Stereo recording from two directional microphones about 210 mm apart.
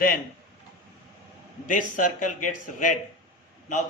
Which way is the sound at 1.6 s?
40° left (ahead or behind).